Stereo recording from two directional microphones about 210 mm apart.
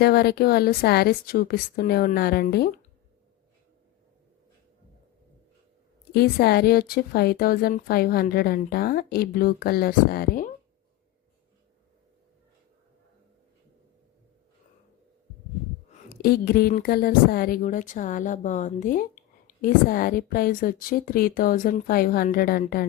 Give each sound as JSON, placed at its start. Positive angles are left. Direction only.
{"t": 0.0, "sound": "speech", "side_deg": 50}
{"t": 6.1, "sound": "speech", "side_deg": 50}
{"t": 16.0, "sound": "a woman's voice", "side_deg": 50}